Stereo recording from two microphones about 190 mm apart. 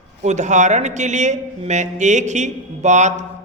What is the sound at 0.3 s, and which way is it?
A man's voice, 40° right (ahead or behind).